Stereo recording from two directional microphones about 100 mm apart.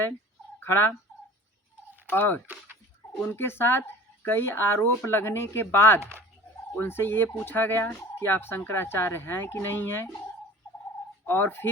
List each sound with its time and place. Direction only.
0.6 s speech: 20° left (ahead or behind)
2.0 s speech: 20° left (ahead or behind)
6.0 s speech: 25° right (ahead or behind)
6.7 s speech: 25° left (ahead or behind)
11.3 s speech: 25° left (ahead or behind)